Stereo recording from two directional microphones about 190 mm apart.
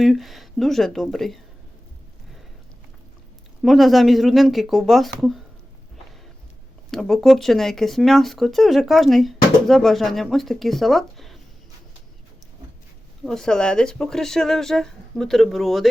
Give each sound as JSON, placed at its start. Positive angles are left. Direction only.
{"t": 0.0, "sound": "speech", "side_deg": 0}
{"t": 3.6, "sound": "speech", "side_deg": 0}
{"t": 6.9, "sound": "speech", "side_deg": 0}
{"t": 13.2, "sound": "speech", "side_deg": 5}